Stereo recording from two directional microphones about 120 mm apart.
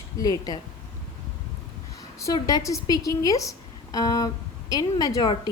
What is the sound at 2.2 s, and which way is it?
A woman's voice, 30° left (ahead or behind).